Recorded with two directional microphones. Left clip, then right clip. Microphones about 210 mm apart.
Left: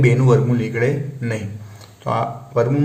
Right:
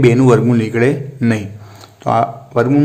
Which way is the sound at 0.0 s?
45° right (ahead or behind).